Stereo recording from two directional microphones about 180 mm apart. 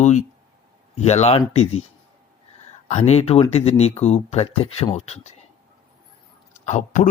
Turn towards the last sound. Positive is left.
turn(degrees=45)  # may be behind; listen again after turning